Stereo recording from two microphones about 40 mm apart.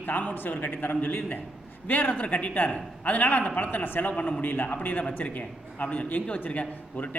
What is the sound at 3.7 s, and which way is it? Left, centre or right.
A man's voice, left.